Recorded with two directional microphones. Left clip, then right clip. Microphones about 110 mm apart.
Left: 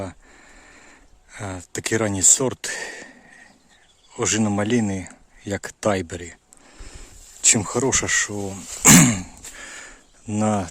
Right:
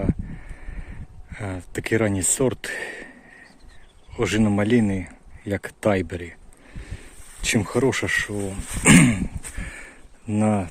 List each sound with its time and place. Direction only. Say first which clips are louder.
0.6 s speech: right 2 dB; 25° left (ahead or behind)
8.3 s speech: right 1 dB; 50° left (ahead or behind)
9.0 s dog: even; 35° left (ahead or behind)
9.6 s a sound: left 1 dB; 25° left (ahead or behind)
10.3 s speech: even; 30° left (ahead or behind)